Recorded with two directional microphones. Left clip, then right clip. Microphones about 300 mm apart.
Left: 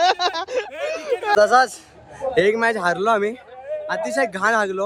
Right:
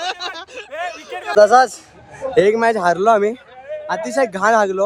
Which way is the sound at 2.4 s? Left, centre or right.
Centre.